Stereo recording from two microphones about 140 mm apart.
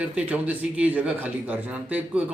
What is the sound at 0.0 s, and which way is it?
A man's voice, 10° right (ahead or behind).